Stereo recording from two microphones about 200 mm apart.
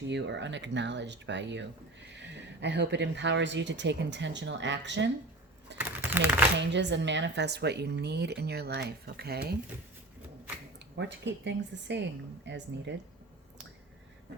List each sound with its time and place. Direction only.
0.1 s speech: 60° right (ahead or behind)
5.7 s typing: 10° right (ahead or behind)
6.6 s speech: 60° right (ahead or behind)
10.8 s speech: 60° right (ahead or behind)